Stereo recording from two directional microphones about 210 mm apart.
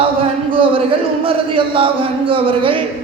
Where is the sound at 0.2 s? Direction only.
25° right (ahead or behind).